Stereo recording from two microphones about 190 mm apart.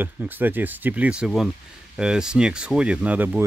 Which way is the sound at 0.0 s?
10° right (ahead or behind).